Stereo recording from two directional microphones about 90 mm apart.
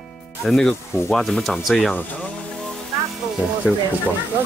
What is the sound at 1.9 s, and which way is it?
Speech, 15° left (ahead or behind).